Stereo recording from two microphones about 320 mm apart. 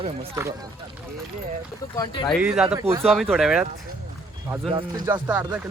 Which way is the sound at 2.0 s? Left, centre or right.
Centre.